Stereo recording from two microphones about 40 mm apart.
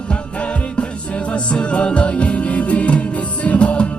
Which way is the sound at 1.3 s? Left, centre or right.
Left.